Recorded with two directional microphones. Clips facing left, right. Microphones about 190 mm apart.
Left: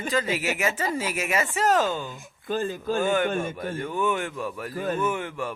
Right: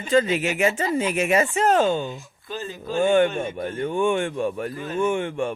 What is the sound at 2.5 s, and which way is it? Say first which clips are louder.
Speech: left 4 dB; 50° left (ahead or behind).